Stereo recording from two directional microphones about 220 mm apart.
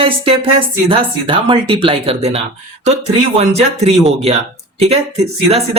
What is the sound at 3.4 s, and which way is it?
Speech, 30° right (ahead or behind).